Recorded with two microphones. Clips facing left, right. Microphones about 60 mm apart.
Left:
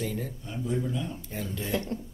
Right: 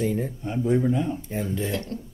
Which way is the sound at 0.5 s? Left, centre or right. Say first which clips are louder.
Right 9 dB; right.